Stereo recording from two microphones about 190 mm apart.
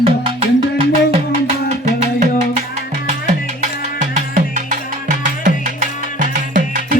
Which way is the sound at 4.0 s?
40° right (ahead or behind).